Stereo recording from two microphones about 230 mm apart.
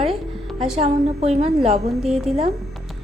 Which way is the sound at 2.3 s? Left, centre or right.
Centre.